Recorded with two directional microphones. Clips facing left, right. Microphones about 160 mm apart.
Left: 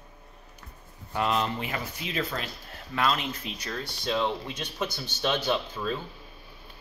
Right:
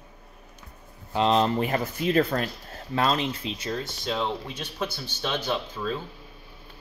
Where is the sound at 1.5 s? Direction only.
45° right (ahead or behind).